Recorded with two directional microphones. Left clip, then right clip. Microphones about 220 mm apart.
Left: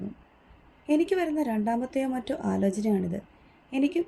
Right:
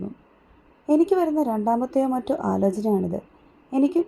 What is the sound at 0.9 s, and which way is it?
A woman's voice, 25° right (ahead or behind).